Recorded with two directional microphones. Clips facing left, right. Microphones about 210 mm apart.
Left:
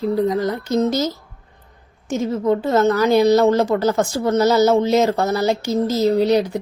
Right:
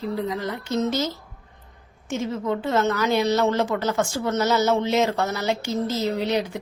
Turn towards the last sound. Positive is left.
turn(degrees=40)  # may be behind; listen again after turning